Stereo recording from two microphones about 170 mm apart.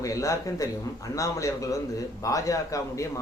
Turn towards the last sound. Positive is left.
turn(degrees=20)  # may be behind; listen again after turning